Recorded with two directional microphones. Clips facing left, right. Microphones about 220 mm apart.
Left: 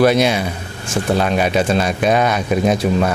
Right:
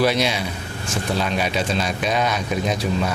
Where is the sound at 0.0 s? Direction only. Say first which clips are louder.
Left 6 dB; 55° left (ahead or behind).